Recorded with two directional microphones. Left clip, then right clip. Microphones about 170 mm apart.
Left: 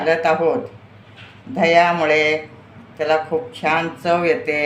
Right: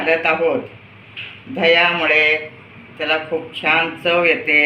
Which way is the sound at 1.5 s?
90° left.